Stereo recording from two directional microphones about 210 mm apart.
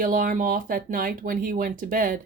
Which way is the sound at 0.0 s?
40° right (ahead or behind).